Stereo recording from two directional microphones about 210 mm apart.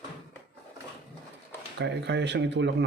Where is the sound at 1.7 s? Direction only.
55° right (ahead or behind).